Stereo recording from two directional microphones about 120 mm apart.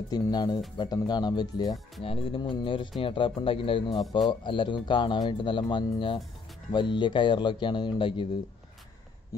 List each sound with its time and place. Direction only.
0.1 s speech: 35° left (ahead or behind)
2.0 s speech: 50° left (ahead or behind)